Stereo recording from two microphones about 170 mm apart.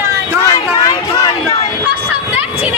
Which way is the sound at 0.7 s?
25° left (ahead or behind).